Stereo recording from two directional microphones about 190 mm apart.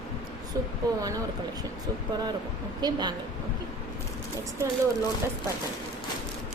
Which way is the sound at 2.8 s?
20° right (ahead or behind).